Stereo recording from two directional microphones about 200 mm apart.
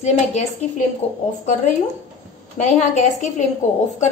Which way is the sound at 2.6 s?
35° left (ahead or behind).